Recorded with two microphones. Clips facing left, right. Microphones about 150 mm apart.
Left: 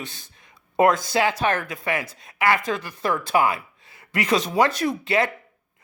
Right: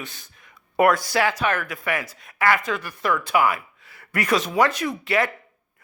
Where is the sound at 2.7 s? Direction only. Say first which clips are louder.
Even; 30° left (ahead or behind).